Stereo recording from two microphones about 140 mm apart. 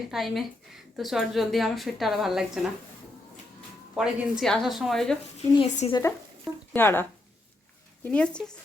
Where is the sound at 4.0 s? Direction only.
Centre (ahead or behind).